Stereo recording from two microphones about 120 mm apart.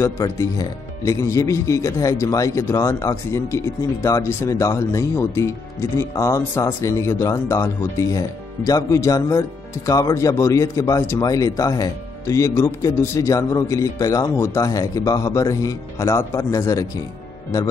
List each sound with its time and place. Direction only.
0.0 s speech: 30° left (ahead or behind)